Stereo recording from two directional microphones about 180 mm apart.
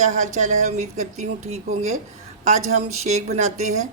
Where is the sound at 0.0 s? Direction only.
40° right (ahead or behind).